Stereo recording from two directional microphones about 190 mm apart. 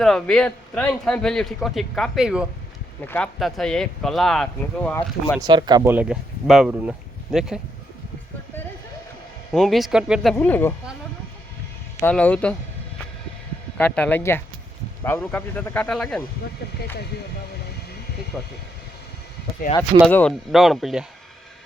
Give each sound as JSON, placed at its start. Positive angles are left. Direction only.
{"t": 0.0, "sound": "a man's voice", "side_deg": 5}
{"t": 5.4, "sound": "speech", "side_deg": -20}
{"t": 5.9, "sound": "speech", "side_deg": -5}
{"t": 9.5, "sound": "a man's voice", "side_deg": 0}
{"t": 10.3, "sound": "speech", "side_deg": 10}
{"t": 11.9, "sound": "speech", "side_deg": 10}
{"t": 13.7, "sound": "speech", "side_deg": 5}
{"t": 18.3, "sound": "a man's voice", "side_deg": 0}
{"t": 20.1, "sound": "a man's voice", "side_deg": 10}